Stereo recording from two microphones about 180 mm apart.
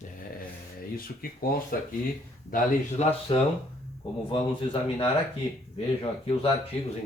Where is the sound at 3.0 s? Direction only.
40° left (ahead or behind).